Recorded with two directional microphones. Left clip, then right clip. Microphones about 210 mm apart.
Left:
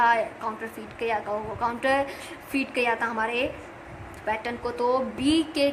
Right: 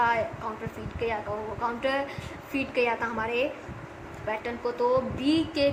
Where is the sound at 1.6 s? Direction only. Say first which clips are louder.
Left 4 dB; 55° left (ahead or behind).